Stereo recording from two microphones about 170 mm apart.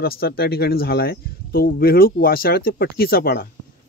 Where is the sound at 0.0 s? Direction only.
65° left (ahead or behind).